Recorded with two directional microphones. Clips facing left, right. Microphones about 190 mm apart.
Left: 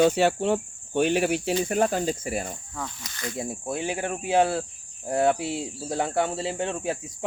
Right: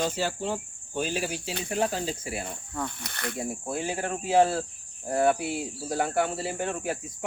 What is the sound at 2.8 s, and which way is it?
Speech, 60° right (ahead or behind).